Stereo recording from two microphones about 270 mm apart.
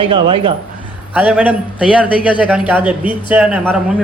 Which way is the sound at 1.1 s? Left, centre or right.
Centre.